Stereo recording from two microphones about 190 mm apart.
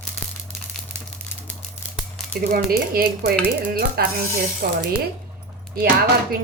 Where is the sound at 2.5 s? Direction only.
50° right (ahead or behind).